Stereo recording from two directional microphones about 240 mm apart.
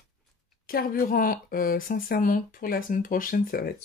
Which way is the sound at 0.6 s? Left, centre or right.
Left.